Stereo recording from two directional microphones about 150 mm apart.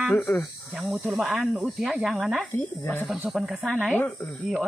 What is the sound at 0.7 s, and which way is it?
Speech, centre (ahead or behind).